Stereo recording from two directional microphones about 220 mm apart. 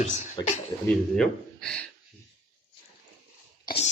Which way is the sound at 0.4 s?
20° left (ahead or behind).